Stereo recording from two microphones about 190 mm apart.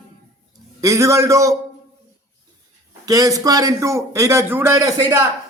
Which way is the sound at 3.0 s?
20° right (ahead or behind).